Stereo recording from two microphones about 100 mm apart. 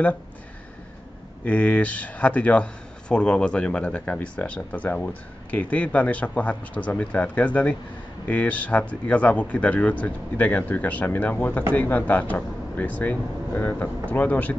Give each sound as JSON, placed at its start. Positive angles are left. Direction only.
{"t": 1.4, "sound": "speech", "side_deg": 15}